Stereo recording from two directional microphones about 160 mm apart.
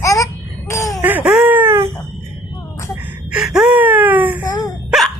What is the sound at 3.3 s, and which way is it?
Wail, 5° right (ahead or behind).